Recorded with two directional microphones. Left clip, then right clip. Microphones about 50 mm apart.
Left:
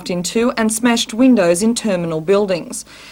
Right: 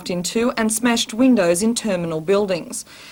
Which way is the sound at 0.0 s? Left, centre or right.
Right.